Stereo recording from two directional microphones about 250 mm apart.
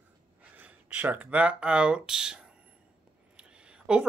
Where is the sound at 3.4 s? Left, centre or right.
Centre.